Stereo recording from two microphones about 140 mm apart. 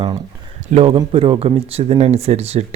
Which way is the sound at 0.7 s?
50° right (ahead or behind).